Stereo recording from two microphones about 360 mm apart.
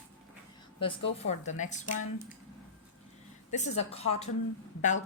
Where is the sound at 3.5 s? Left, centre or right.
Centre.